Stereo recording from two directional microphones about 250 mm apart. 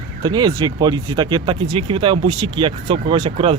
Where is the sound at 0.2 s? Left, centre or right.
Centre.